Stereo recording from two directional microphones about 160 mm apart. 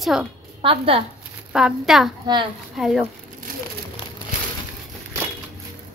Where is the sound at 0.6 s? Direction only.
35° right (ahead or behind).